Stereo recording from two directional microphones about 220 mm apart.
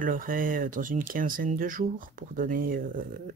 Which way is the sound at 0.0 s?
40° right (ahead or behind).